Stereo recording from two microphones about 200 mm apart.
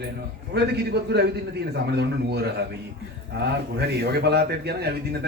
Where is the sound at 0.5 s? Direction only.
55° right (ahead or behind).